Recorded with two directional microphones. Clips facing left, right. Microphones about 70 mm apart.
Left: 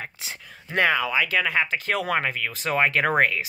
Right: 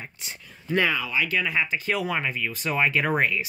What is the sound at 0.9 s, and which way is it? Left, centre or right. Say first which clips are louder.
Speech: left 3 dB; left.